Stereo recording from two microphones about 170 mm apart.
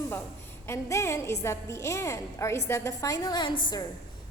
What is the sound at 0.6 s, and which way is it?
A woman's voice, 15° left (ahead or behind).